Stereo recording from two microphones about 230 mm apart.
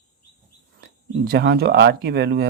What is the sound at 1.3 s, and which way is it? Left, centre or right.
Speech, right.